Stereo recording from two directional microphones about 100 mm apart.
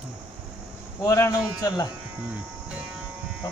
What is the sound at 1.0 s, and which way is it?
Speech, 35° left (ahead or behind).